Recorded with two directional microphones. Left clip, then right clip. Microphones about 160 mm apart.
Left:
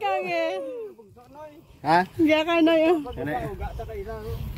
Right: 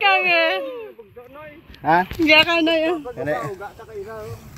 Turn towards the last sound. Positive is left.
turn(degrees=-30)  # may be behind; listen again after turning